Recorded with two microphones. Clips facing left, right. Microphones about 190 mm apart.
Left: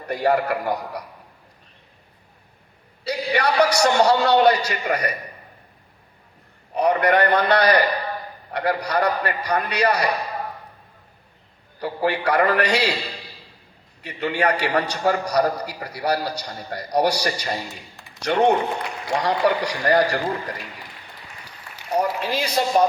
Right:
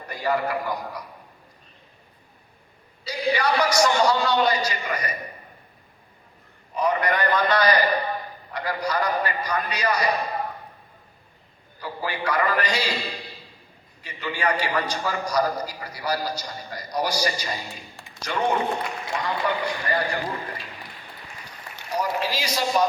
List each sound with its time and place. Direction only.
0.1 s a man's voice: 65° left (ahead or behind)
3.0 s a man's voice: 65° left (ahead or behind)
6.7 s a man's voice: 65° left (ahead or behind)
11.8 s a man's voice: 65° left (ahead or behind)
14.0 s a man's voice: 65° left (ahead or behind)
21.9 s a man's voice: 55° left (ahead or behind)